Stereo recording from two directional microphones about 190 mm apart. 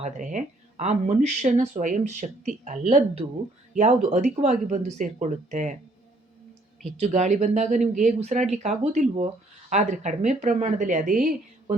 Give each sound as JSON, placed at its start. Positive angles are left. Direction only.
{"t": 0.0, "sound": "speech", "side_deg": -40}
{"t": 7.0, "sound": "speech", "side_deg": -40}